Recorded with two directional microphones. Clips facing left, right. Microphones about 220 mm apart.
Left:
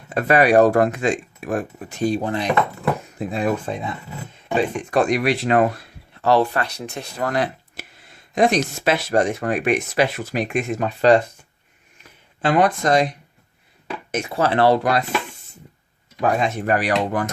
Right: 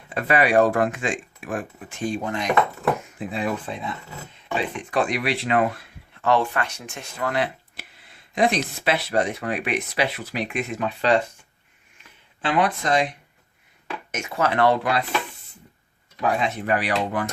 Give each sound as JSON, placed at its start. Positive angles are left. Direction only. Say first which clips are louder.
{"t": 0.1, "sound": "speech", "louder": "left 4 dB", "side_deg": 45}
{"t": 3.2, "sound": "speech", "louder": "left 4 dB", "side_deg": 45}
{"t": 12.4, "sound": "speech", "louder": "left 5 dB", "side_deg": 45}
{"t": 16.2, "sound": "speech", "louder": "left 3 dB", "side_deg": 45}